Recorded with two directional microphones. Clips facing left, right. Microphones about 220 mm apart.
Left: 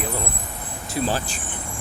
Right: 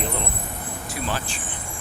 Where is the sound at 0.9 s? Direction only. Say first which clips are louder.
Left 6 dB; 35° left (ahead or behind).